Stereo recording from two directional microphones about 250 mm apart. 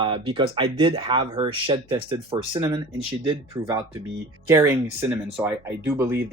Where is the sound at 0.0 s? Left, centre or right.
Centre.